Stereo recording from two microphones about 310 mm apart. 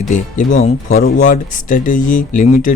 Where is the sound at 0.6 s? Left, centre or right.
Left.